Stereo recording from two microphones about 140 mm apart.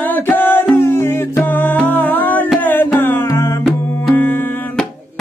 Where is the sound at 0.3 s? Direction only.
15° left (ahead or behind).